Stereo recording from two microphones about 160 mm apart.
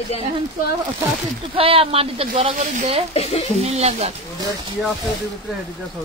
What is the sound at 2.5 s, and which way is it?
Speech, 45° right (ahead or behind).